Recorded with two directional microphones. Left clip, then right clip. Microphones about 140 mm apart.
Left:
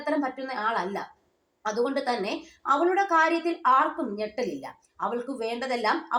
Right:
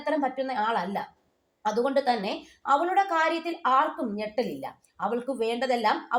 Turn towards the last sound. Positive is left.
turn(degrees=-40)  # may be behind; listen again after turning